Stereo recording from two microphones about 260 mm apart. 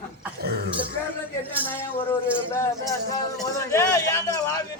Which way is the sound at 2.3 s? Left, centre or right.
Centre.